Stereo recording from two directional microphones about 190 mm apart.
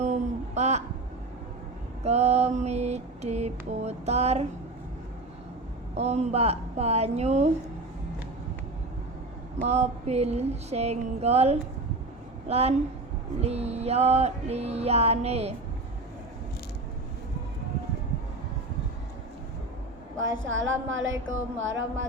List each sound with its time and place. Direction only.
0.0 s a sound: 35° right (ahead or behind)
2.0 s mantra: 35° right (ahead or behind)
6.0 s mantra: 35° right (ahead or behind)
9.6 s mantra: 35° right (ahead or behind)
20.5 s a sound: 85° right
21.6 s speech: 80° right